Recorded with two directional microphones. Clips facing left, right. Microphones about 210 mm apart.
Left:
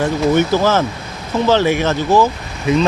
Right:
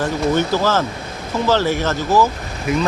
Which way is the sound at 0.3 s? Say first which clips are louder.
Left 4 dB; 20° left (ahead or behind).